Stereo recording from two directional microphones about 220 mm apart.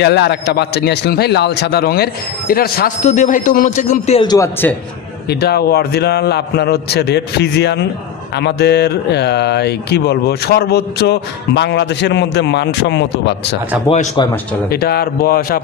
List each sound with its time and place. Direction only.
0.0 s speech: 50° left (ahead or behind); by 4.7 s 10° left (ahead or behind)
5.3 s speech: 45° left (ahead or behind)
13.8 s speech: 20° left (ahead or behind)
14.7 s speech: 45° left (ahead or behind)